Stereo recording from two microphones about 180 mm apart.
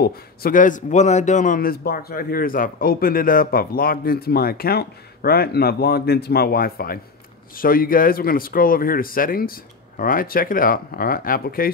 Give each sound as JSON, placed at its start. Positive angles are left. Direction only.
{"t": 0.0, "sound": "a man's voice", "side_deg": 55}